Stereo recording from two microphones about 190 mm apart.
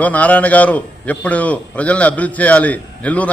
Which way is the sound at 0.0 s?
10° left (ahead or behind).